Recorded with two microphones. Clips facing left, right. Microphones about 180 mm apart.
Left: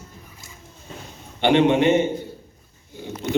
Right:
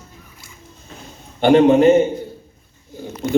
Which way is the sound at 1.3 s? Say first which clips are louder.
Right 5 dB; 45° right (ahead or behind).